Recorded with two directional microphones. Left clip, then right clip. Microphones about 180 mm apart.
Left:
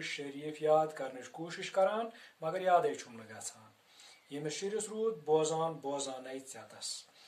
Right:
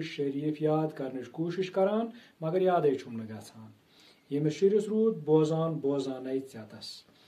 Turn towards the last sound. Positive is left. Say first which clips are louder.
# even
turn(degrees=15)  # may be behind; listen again after turning